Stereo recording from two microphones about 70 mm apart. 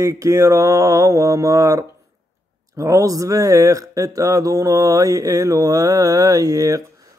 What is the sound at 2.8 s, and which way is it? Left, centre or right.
Speech, right.